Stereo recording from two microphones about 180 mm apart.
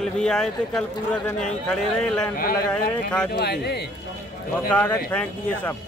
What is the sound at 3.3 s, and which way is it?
Speech, 65° left (ahead or behind).